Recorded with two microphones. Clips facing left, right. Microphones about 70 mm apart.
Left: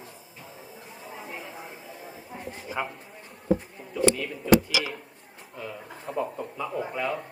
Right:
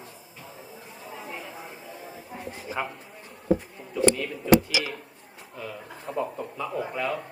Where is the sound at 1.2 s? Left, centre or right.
Centre.